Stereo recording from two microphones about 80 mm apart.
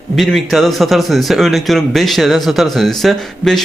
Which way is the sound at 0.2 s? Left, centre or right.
Centre.